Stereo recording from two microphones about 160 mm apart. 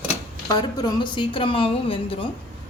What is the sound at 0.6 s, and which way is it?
A woman's voice, 25° left (ahead or behind).